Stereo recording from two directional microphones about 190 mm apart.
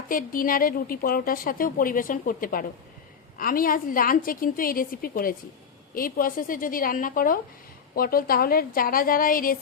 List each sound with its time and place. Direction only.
0.1 s a woman's voice: 45° left (ahead or behind)